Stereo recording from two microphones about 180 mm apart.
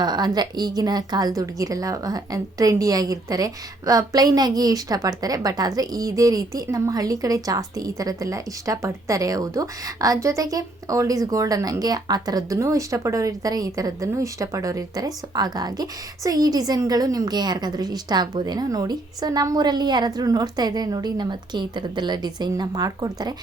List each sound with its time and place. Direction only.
0.0 s a woman's voice: 25° right (ahead or behind)